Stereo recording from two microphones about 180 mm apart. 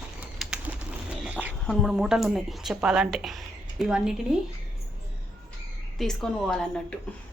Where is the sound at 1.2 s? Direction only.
5° right (ahead or behind).